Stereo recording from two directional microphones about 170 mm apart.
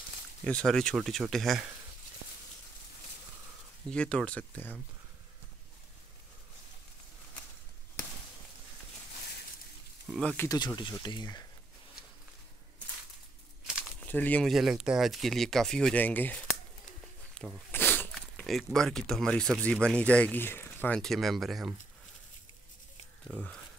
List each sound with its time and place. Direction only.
0.4 s speech: 5° left (ahead or behind)
3.9 s speech: 5° left (ahead or behind)
10.0 s speech: centre (ahead or behind)
10.3 s speech: 15° left (ahead or behind)
10.8 s speech: 25° left (ahead or behind)
13.9 s speech: 10° left (ahead or behind)
23.2 s speech: 5° left (ahead or behind)